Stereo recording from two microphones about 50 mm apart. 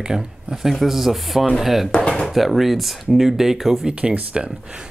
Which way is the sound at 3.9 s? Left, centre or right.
Right.